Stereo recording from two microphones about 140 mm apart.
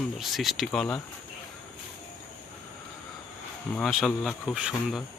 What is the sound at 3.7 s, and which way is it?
Speech, centre (ahead or behind).